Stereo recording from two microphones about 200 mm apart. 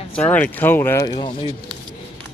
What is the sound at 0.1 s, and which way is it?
Speech, 10° left (ahead or behind).